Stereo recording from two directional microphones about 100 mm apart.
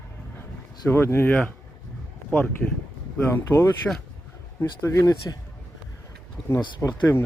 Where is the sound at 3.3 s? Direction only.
25° left (ahead or behind).